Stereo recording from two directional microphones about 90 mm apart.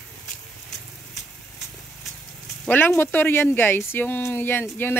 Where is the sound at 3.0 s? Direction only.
25° left (ahead or behind).